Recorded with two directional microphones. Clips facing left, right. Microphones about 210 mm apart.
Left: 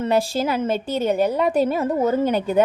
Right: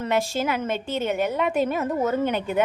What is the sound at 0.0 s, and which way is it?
A woman's voice, 30° left (ahead or behind).